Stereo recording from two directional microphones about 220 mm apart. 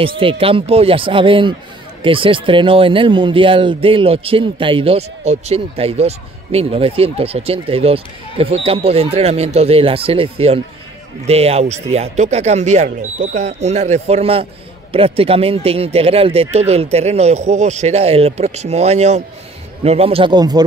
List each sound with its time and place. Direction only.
0.0 s speech: 25° right (ahead or behind)